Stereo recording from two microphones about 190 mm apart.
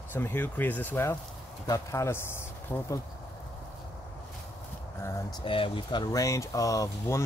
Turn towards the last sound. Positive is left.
turn(degrees=15)  # may be behind; listen again after turning